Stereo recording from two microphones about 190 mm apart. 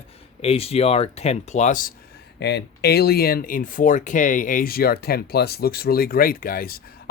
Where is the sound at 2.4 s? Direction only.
60° left (ahead or behind).